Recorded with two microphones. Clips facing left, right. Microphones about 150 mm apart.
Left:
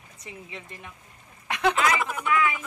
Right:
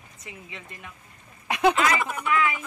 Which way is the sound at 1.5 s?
10° right (ahead or behind).